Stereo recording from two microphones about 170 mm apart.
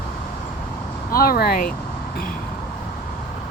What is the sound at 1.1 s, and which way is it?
Speech, 60° left (ahead or behind).